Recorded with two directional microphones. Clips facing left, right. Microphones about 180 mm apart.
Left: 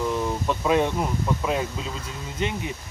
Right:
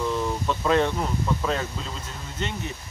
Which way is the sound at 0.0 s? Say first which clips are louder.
Left 1 dB; 15° left (ahead or behind).